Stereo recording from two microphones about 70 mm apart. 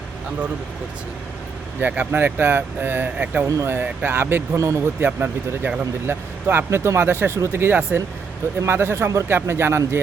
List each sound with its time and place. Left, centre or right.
1.8 s speech: right
3.4 s speech: right
4.0 s speech: right
4.5 s speech: right
5.0 s speech: right